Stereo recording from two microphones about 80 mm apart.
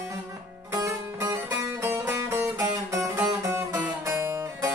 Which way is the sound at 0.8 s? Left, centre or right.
Right.